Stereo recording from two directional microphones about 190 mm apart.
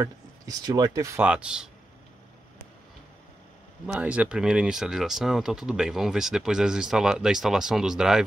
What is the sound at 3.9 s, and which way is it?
Speech, 5° right (ahead or behind).